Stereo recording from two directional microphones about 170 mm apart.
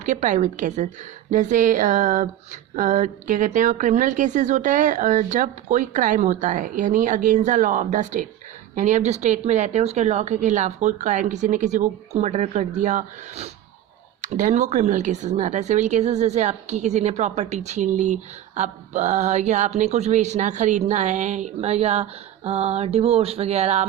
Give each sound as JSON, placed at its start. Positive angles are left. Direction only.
{"t": 0.0, "sound": "speech", "side_deg": -45}